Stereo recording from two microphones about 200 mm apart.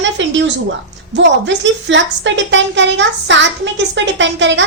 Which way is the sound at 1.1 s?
65° right (ahead or behind).